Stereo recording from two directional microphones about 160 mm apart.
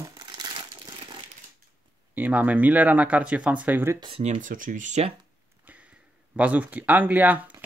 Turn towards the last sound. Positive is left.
turn(degrees=-10)  # may be behind; listen again after turning